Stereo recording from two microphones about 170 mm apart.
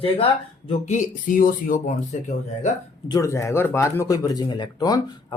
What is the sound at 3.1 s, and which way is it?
Speech, 20° left (ahead or behind).